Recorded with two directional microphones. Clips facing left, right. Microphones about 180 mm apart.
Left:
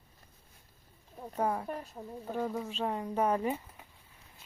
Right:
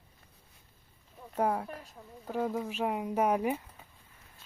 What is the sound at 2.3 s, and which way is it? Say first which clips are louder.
Speech: right 3 dB; 10° right (ahead or behind).